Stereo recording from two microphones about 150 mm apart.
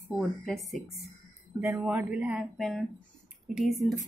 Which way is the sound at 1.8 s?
10° right (ahead or behind).